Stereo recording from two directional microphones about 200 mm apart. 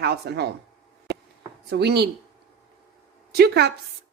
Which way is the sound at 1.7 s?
55° right (ahead or behind).